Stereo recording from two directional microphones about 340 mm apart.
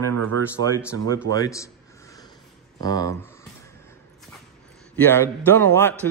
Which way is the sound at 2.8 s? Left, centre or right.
Centre.